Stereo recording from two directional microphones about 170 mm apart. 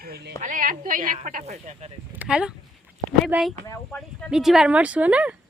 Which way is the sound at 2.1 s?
5° right (ahead or behind).